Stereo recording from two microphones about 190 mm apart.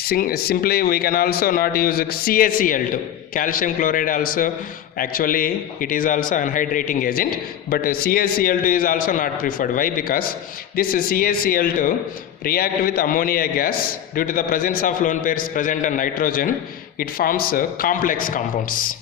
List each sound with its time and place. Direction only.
0.0 s speech: 50° left (ahead or behind)